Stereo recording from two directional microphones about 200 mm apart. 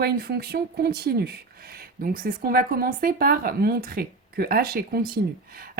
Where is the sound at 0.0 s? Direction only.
50° right (ahead or behind).